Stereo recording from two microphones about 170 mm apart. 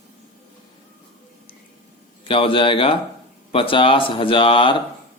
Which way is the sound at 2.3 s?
30° left (ahead or behind).